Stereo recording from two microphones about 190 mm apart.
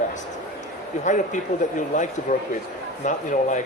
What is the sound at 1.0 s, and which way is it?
A man's voice, 40° left (ahead or behind).